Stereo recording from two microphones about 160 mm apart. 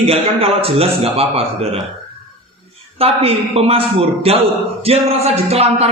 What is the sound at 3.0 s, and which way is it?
A man's voice, 40° right (ahead or behind).